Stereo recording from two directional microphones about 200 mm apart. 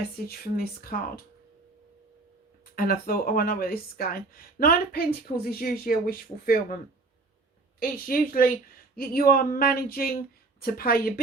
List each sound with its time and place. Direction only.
0.3 s speech: 50° left (ahead or behind)
2.7 s speech: 45° left (ahead or behind)
7.8 s speech: 45° left (ahead or behind)